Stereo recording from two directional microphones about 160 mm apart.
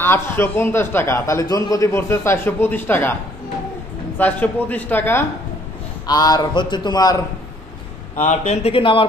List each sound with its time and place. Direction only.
0.0 s a man's voice: 15° left (ahead or behind)
4.2 s a man's voice: 10° left (ahead or behind)
6.0 s a man's voice: 25° left (ahead or behind)
8.2 s speech: 50° left (ahead or behind)